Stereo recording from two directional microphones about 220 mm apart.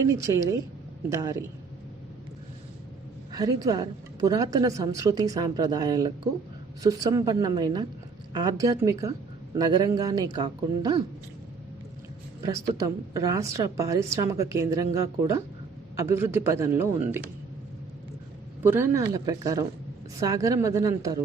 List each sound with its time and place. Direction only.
0.1 s a woman's voice: 15° right (ahead or behind)
3.3 s a woman's voice: 15° right (ahead or behind)
12.4 s a woman's voice: 15° right (ahead or behind)
18.6 s a woman's voice: 10° right (ahead or behind)